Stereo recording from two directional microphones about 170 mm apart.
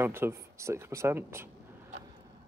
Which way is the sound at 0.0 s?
15° right (ahead or behind).